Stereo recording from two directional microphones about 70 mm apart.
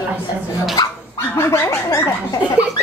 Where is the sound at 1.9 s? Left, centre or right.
Left.